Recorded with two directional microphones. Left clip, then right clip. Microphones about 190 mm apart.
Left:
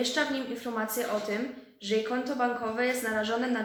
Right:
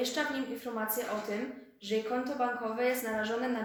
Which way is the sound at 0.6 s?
30° left (ahead or behind).